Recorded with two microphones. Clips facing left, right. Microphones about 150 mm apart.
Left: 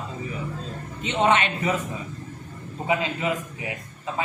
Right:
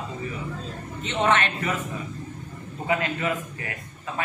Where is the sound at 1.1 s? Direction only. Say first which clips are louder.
Left 2 dB; 15° left (ahead or behind).